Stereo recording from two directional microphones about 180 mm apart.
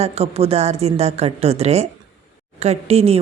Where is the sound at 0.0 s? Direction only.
35° right (ahead or behind).